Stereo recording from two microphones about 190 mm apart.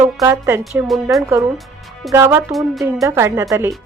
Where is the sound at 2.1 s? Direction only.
15° right (ahead or behind).